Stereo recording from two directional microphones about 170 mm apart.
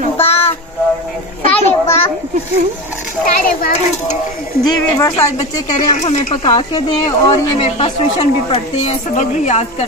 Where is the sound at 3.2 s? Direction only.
55° left (ahead or behind).